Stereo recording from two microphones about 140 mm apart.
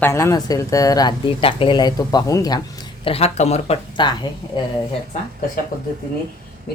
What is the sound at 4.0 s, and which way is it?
Speech, 35° left (ahead or behind).